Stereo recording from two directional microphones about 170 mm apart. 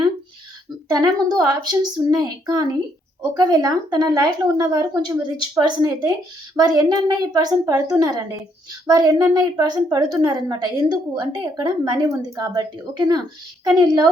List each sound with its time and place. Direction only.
0.9 s a woman's voice: 25° right (ahead or behind)